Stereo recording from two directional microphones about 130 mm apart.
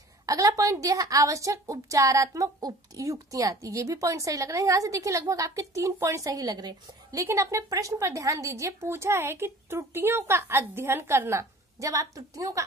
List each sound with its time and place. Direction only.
0.3 s a woman's voice: 25° right (ahead or behind)